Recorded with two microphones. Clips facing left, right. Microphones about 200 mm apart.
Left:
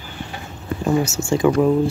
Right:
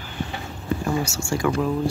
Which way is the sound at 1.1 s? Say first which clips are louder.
Left 6 dB; 20° left (ahead or behind).